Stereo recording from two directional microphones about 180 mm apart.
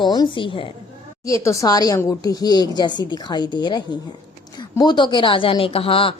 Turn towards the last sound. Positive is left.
turn(degrees=30)  # may be behind; listen again after turning